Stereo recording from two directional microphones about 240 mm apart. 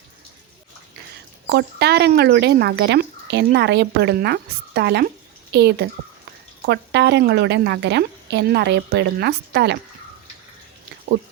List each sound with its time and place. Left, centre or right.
1.5 s speech: right